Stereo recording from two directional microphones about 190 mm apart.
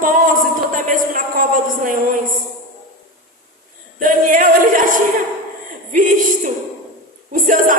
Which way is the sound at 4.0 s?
45° right (ahead or behind).